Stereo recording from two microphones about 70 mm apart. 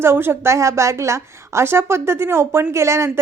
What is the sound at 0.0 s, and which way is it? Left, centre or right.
A woman's voice, right.